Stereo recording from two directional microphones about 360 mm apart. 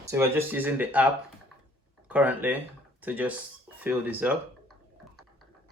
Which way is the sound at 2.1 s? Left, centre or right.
Centre.